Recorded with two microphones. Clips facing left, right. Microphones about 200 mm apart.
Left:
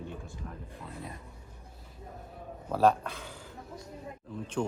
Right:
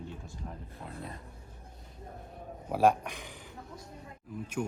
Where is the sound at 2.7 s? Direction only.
10° right (ahead or behind).